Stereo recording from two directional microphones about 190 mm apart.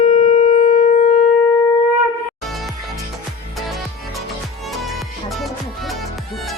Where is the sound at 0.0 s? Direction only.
35° left (ahead or behind).